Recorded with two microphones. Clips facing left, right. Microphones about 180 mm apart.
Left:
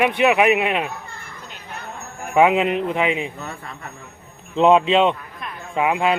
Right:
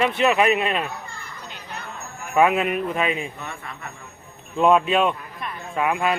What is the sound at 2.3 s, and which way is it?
Speech, 20° left (ahead or behind).